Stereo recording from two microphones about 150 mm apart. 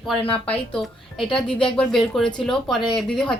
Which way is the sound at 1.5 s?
35° left (ahead or behind).